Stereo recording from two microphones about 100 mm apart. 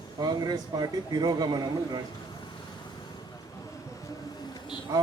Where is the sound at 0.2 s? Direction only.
40° right (ahead or behind).